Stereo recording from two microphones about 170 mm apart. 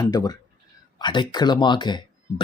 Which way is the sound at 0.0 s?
25° left (ahead or behind).